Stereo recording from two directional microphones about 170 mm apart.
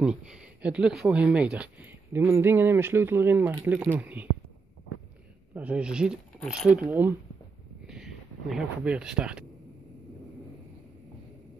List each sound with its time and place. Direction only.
0.0 s speech: 5° right (ahead or behind)
5.5 s speech: 5° right (ahead or behind)
7.8 s a sound: 5° right (ahead or behind)